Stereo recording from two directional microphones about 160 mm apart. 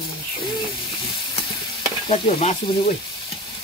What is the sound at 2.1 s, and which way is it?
Stir, 35° left (ahead or behind).